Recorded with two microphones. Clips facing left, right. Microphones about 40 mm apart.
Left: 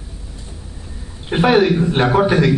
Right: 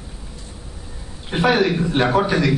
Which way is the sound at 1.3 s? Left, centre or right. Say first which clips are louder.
Left 4 dB; centre.